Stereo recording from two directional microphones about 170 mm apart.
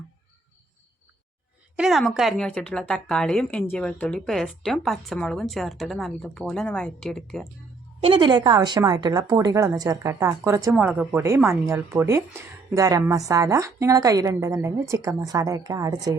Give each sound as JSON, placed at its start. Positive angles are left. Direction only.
{"t": 1.7, "sound": "a woman's voice", "side_deg": 0}
{"t": 8.0, "sound": "a woman's voice", "side_deg": -30}